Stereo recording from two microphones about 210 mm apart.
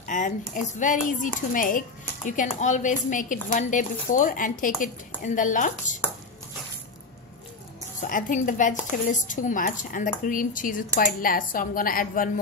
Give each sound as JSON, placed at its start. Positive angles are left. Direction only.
{"t": 0.0, "sound": "a sound", "side_deg": 35}
{"t": 0.6, "sound": "a woman's voice", "side_deg": 35}
{"t": 8.0, "sound": "a woman's voice", "side_deg": 40}